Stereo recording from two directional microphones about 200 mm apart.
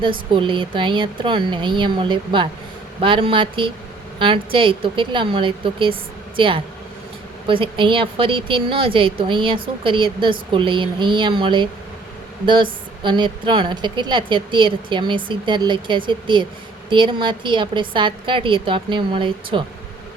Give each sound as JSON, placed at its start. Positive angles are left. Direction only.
{"t": 0.0, "sound": "a woman's voice", "side_deg": -25}